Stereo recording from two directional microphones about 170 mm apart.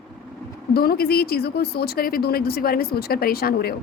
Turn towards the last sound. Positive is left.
turn(degrees=65)  # may be behind; listen again after turning